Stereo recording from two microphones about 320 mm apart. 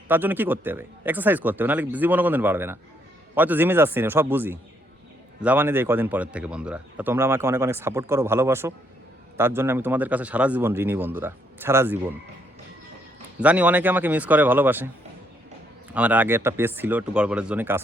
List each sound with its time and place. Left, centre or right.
0.1 s speech: centre
13.4 s speech: centre
15.9 s speech: centre